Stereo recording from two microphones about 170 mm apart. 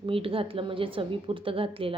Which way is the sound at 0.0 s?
30° right (ahead or behind).